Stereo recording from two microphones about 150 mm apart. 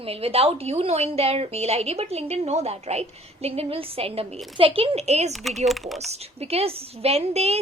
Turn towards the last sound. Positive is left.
turn(degrees=-45)  # may be behind; listen again after turning